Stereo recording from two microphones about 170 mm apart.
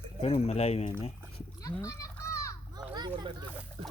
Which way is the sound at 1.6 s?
20° left (ahead or behind).